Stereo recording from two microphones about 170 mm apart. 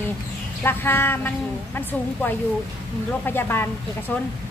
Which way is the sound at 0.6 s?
15° left (ahead or behind).